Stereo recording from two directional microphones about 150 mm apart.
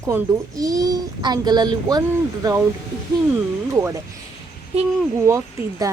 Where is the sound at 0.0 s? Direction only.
20° right (ahead or behind).